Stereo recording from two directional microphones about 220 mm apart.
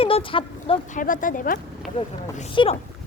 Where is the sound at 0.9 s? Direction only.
35° left (ahead or behind).